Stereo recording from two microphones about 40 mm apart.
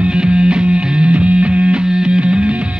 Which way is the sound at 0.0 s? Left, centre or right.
Right.